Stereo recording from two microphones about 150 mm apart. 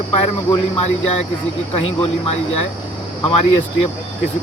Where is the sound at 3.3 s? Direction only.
40° left (ahead or behind).